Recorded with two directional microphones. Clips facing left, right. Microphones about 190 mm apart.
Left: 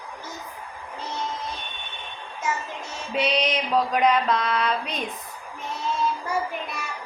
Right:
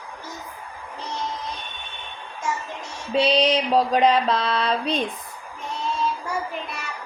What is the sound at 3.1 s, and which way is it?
Mantra, 30° right (ahead or behind).